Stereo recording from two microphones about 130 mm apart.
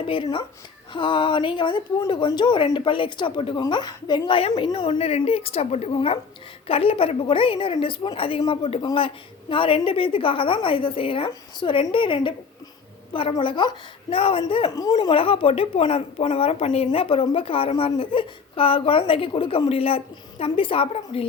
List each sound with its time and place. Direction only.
0.1 s speech: 40° left (ahead or behind)
4.4 s a woman's voice: 45° left (ahead or behind)
13.4 s a woman's voice: 40° left (ahead or behind)